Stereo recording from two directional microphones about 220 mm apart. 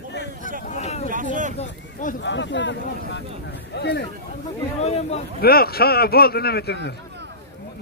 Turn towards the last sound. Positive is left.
turn(degrees=50)  # may be behind; listen again after turning